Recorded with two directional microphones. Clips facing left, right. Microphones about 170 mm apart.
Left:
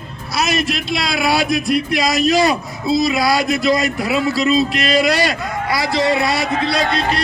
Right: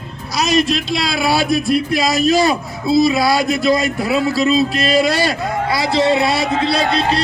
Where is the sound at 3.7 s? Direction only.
25° right (ahead or behind).